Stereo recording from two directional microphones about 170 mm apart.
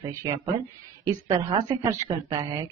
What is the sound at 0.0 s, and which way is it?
A woman's voice, 20° right (ahead or behind).